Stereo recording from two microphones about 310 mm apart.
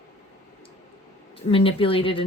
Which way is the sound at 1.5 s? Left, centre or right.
Centre.